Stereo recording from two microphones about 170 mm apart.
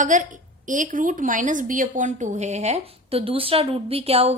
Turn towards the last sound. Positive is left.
turn(degrees=-35)  # may be behind; listen again after turning